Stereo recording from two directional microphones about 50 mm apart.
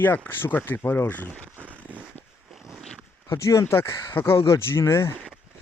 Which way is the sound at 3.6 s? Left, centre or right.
Left.